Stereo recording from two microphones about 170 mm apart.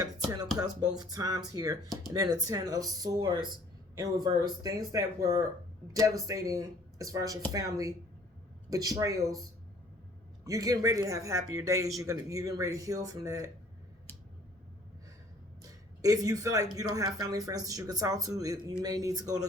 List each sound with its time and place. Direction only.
0.5 s speech: 20° right (ahead or behind)
10.4 s speech: 20° right (ahead or behind)
15.6 s speech: 20° right (ahead or behind)